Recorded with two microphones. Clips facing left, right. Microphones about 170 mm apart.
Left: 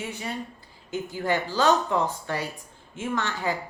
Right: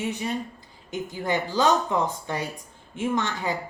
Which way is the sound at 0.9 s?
15° right (ahead or behind).